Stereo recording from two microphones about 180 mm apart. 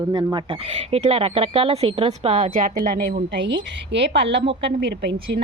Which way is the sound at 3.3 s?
80° right.